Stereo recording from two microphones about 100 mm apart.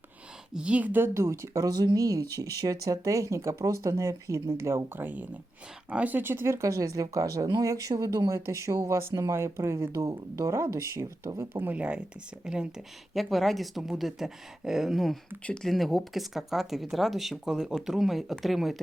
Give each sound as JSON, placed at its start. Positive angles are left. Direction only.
{"t": 0.5, "sound": "speech", "side_deg": -10}
{"t": 11.5, "sound": "speech", "side_deg": -15}